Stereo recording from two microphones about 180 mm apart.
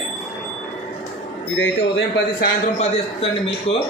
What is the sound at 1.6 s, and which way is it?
Speech, 90° left.